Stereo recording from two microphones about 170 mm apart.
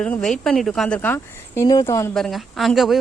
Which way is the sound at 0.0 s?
5° left (ahead or behind).